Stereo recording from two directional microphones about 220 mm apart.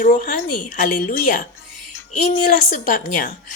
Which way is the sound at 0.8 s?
35° left (ahead or behind).